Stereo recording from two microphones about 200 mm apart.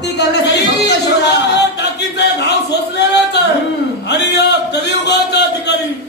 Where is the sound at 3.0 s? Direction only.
55° left (ahead or behind).